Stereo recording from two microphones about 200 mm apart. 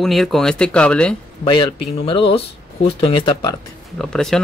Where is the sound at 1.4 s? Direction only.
25° left (ahead or behind).